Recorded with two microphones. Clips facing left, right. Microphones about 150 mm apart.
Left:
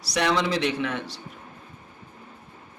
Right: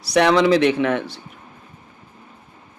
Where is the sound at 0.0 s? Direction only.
60° right (ahead or behind).